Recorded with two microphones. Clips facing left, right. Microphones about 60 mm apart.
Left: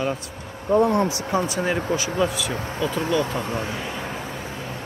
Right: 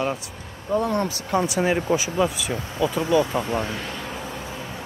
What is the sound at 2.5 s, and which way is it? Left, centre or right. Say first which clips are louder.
Speech: left 1 dB; left.